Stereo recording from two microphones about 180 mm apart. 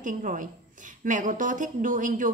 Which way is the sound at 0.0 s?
45° right (ahead or behind).